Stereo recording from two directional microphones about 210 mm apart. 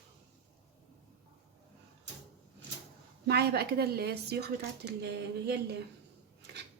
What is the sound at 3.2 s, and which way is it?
Speech, 50° right (ahead or behind).